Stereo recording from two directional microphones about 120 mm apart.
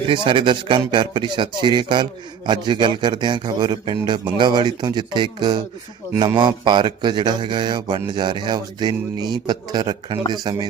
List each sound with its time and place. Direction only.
0.1 s speech: 45° right (ahead or behind)